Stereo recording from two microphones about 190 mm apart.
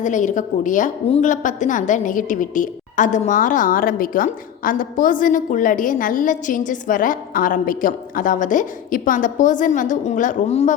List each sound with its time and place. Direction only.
0.0 s a woman's voice: 40° left (ahead or behind)